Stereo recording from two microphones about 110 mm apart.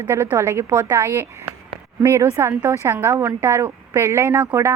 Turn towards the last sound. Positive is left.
turn(degrees=-25)  # may be behind; listen again after turning